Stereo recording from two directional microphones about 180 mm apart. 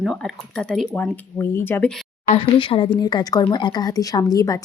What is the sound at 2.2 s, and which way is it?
Speech, 35° left (ahead or behind).